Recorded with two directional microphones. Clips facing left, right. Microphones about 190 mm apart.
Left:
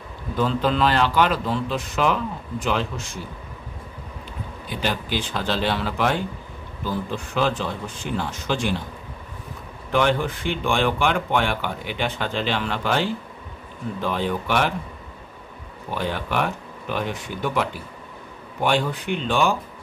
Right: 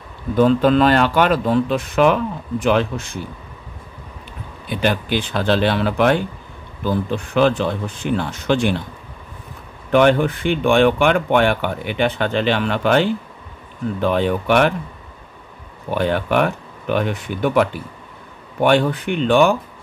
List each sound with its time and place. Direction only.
0.4 s speech: 50° right (ahead or behind)
4.6 s speech: 60° right (ahead or behind)
7.3 s speech: 65° right (ahead or behind)
9.8 s speech: 60° right (ahead or behind)
15.9 s speech: 60° right (ahead or behind)